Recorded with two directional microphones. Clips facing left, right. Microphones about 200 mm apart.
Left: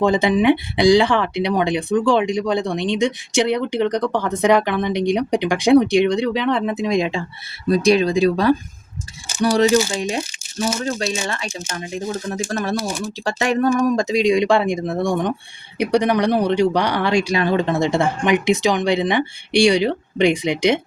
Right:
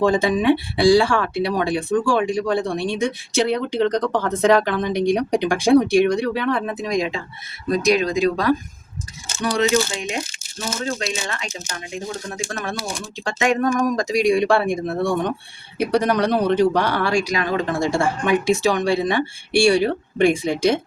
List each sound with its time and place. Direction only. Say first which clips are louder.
0.0 s speech: left 2 dB; 20° left (ahead or behind); by 12.7 s 40° left (ahead or behind)
13.9 s speech: left 1 dB; 25° left (ahead or behind)